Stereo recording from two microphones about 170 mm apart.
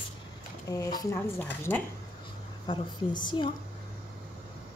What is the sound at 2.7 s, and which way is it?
Speech, 25° left (ahead or behind).